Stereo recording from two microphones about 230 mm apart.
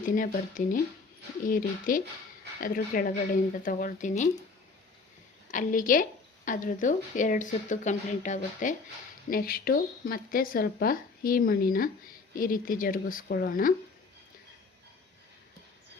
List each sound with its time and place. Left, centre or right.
0.0 s a woman's voice: left
5.5 s a woman's voice: left